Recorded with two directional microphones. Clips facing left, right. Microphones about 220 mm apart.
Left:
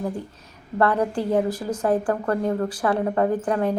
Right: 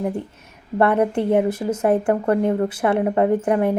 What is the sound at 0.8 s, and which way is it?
A woman's voice, 25° right (ahead or behind).